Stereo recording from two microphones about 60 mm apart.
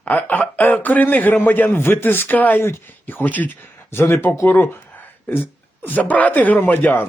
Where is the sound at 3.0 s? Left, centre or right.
Left.